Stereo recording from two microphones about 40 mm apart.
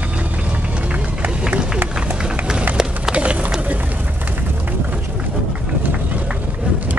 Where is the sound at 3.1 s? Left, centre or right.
Right.